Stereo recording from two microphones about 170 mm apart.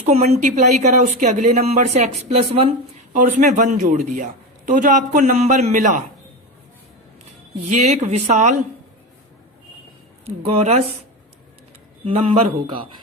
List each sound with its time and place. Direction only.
0.0 s a woman's voice: 40° right (ahead or behind)
3.1 s a woman's voice: 45° right (ahead or behind)
7.7 s a woman's voice: 45° right (ahead or behind)
10.2 s a woman's voice: 35° right (ahead or behind)
12.0 s a woman's voice: 35° right (ahead or behind)